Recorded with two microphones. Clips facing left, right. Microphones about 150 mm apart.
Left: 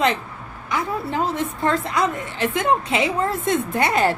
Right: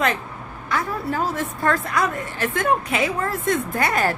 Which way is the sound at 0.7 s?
20° left (ahead or behind).